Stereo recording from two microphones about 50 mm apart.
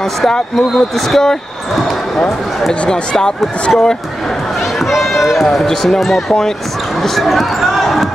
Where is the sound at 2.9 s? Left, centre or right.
Centre.